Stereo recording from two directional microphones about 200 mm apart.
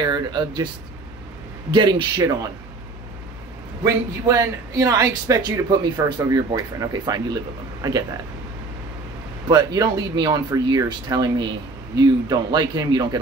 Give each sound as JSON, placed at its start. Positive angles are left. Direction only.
{"t": 0.0, "sound": "a man's voice", "side_deg": -20}
{"t": 1.7, "sound": "a man's voice", "side_deg": -20}
{"t": 3.8, "sound": "a man's voice", "side_deg": -15}
{"t": 9.5, "sound": "a man's voice", "side_deg": -20}